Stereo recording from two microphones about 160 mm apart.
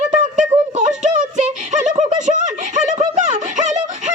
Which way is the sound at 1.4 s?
50° right (ahead or behind).